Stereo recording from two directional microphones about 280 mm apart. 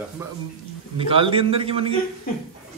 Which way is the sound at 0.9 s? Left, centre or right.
Centre.